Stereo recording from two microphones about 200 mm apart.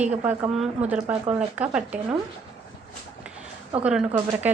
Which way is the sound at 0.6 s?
5° right (ahead or behind).